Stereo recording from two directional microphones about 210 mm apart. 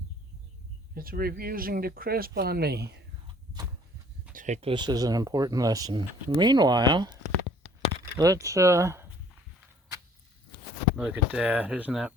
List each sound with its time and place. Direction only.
0.9 s speech: 45° right (ahead or behind)
4.3 s speech: 35° right (ahead or behind); by 9.0 s 15° right (ahead or behind)
10.9 s speech: 5° right (ahead or behind)